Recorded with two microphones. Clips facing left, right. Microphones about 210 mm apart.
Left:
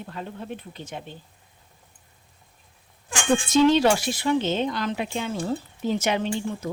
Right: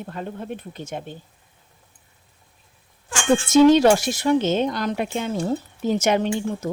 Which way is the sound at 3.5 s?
45° right (ahead or behind).